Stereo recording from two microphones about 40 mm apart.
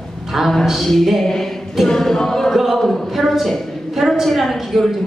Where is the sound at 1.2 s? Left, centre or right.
Centre.